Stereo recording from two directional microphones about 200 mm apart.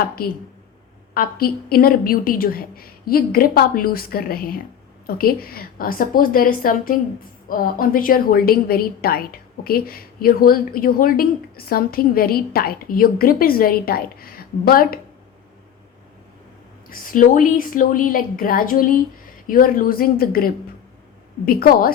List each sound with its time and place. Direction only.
1.1 s a woman's voice: 50° left (ahead or behind)
16.9 s a woman's voice: 45° left (ahead or behind)